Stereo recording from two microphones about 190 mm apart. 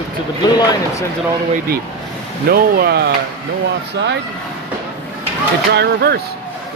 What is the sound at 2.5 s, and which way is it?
Speech, 55° right (ahead or behind).